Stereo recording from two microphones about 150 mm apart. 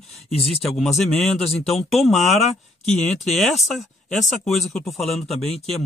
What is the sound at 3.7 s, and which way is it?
Speech, centre (ahead or behind).